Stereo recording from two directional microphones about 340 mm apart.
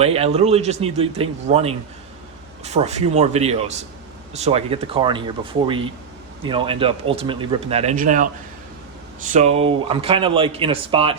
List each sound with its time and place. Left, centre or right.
0.0 s speech: centre
9.3 s speech: centre